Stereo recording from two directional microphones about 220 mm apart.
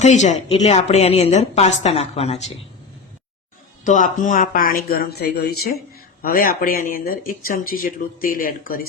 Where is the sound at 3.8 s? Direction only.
35° left (ahead or behind).